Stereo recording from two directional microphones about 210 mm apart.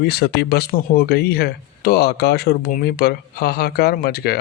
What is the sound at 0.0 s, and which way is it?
Speech, 50° left (ahead or behind).